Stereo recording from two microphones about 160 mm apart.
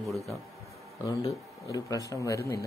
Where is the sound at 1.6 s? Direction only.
20° left (ahead or behind).